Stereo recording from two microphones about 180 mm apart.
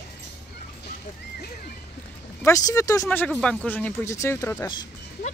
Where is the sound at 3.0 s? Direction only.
5° left (ahead or behind).